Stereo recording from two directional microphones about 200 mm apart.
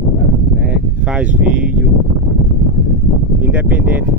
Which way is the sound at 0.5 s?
5° right (ahead or behind).